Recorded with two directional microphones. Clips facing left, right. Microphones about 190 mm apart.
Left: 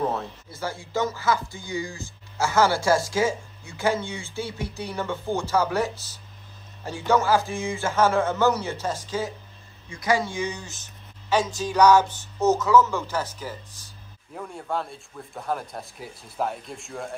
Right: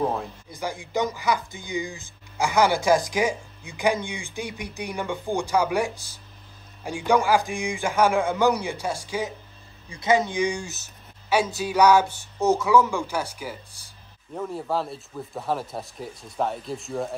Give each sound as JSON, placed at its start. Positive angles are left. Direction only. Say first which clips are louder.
{"t": 0.0, "sound": "speech", "louder": "right 1 dB", "side_deg": -15}
{"t": 9.8, "sound": "speech", "louder": "right 2 dB", "side_deg": -25}